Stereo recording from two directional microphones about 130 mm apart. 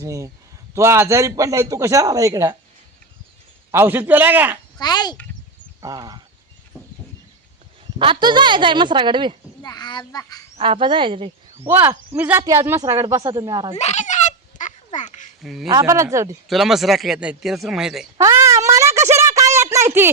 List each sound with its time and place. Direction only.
0.0 s speech: 25° right (ahead or behind)
3.7 s a man's voice: 15° right (ahead or behind)
4.8 s a child's voice: 30° left (ahead or behind)
5.8 s speech: 30° right (ahead or behind)
7.9 s speech: 40° right (ahead or behind)
9.6 s a child's voice: 30° left (ahead or behind)
10.6 s speech: 40° right (ahead or behind)
11.6 s speech: 20° right (ahead or behind)
13.7 s a sound: 60° left (ahead or behind)
14.9 s duck: 70° left (ahead or behind)
15.4 s speech: 5° right (ahead or behind)
15.7 s speech: 25° right (ahead or behind)
16.5 s speech: centre (ahead or behind)
18.2 s a sound: 25° right (ahead or behind)